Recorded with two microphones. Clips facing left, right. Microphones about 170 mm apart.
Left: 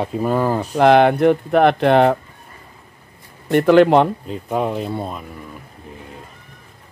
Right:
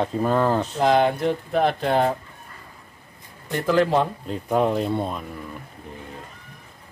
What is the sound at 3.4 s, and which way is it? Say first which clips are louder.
Speech: left 9 dB; 65° left (ahead or behind).